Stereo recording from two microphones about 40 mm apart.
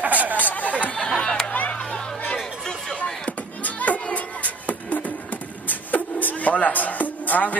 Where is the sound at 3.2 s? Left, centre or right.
Left.